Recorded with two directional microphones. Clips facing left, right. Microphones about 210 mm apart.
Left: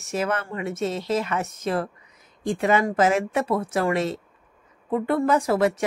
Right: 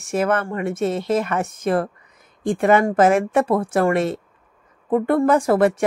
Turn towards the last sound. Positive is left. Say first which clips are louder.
# right 4 dB
turn(degrees=-55)  # may be behind; listen again after turning